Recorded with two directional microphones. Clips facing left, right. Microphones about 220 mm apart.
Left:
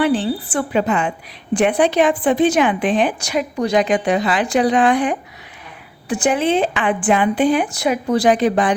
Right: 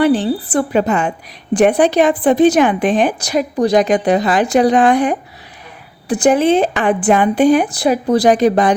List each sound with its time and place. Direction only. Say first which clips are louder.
0.0 s a woman's voice: right 4 dB; 40° right (ahead or behind)